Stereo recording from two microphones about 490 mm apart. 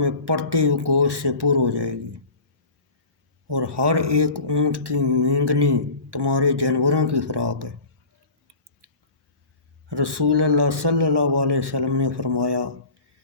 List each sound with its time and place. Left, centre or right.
0.0 s speech: right
3.4 s speech: right
9.9 s speech: right